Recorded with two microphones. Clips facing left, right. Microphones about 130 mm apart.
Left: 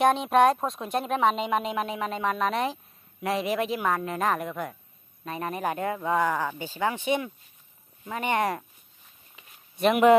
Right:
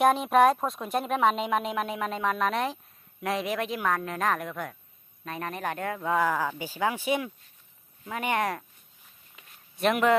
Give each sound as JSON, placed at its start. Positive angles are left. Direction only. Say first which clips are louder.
{"t": 0.0, "sound": "speech", "louder": "even", "side_deg": 0}
{"t": 9.3, "sound": "walk", "louder": "left 1 dB", "side_deg": 0}